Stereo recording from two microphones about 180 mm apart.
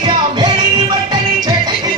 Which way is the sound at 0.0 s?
25° right (ahead or behind).